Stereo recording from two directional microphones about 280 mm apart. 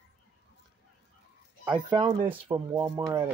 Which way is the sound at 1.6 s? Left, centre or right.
Centre.